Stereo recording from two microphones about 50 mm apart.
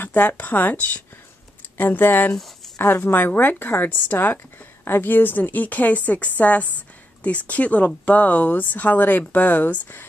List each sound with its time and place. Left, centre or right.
0.0 s speech: left
4.8 s speech: left